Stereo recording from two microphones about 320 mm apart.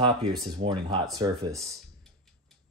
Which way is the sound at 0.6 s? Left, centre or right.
Centre.